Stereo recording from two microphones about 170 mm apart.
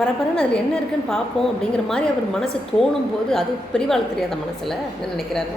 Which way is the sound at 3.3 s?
5° left (ahead or behind).